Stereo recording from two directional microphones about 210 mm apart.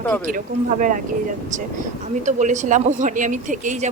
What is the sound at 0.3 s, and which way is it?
Speech, 40° right (ahead or behind).